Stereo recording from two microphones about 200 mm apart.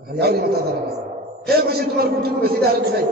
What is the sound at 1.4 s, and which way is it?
A man's voice, 50° right (ahead or behind).